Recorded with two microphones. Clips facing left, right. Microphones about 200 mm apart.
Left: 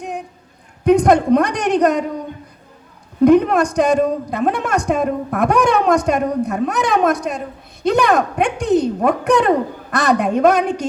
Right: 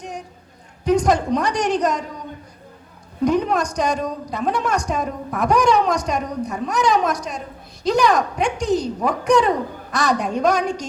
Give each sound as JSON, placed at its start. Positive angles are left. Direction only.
{"t": 0.9, "sound": "a man's voice", "side_deg": 60}
{"t": 3.2, "sound": "a man's voice", "side_deg": 55}